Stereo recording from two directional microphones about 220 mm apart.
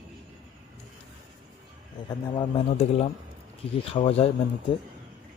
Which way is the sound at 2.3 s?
25° left (ahead or behind).